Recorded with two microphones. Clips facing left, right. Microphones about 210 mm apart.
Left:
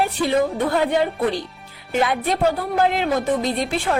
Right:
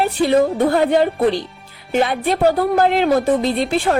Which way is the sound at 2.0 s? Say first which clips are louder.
Right 3 dB; 30° right (ahead or behind).